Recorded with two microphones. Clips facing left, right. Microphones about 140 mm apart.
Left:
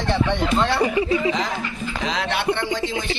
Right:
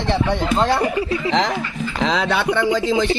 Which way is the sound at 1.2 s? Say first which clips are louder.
Right 4 dB; 90° right.